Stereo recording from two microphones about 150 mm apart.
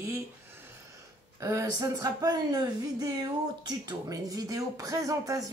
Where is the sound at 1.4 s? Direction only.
20° right (ahead or behind).